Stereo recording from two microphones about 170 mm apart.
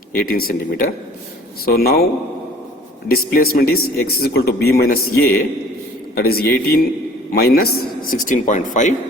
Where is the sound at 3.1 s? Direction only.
60° left (ahead or behind).